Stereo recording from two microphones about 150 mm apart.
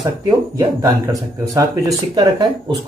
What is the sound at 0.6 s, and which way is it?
Speech, 25° right (ahead or behind).